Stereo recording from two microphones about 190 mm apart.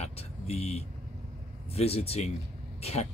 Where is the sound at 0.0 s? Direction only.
35° left (ahead or behind).